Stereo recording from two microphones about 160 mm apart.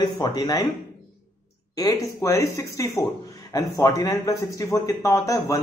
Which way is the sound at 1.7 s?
20° left (ahead or behind).